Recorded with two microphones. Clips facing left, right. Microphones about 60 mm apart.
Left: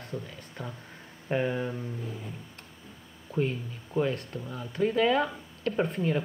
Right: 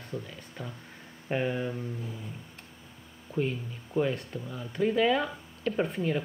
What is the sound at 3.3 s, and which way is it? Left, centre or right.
Speech, centre.